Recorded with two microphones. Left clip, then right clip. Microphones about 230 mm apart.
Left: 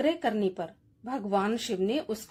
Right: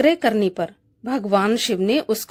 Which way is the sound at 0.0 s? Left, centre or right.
Right.